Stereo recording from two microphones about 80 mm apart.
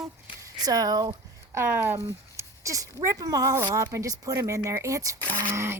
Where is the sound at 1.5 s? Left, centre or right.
Right.